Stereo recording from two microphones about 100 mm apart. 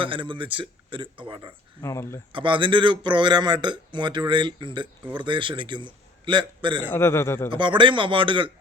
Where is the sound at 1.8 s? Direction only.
30° left (ahead or behind).